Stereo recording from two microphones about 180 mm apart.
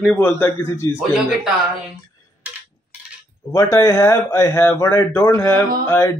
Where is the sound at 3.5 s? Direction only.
15° left (ahead or behind).